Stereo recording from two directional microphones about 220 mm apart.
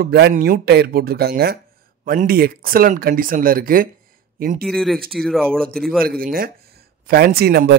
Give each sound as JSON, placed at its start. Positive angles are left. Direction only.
{"t": 0.0, "sound": "speech", "side_deg": -45}
{"t": 4.6, "sound": "speech", "side_deg": 0}
{"t": 6.0, "sound": "speech", "side_deg": -40}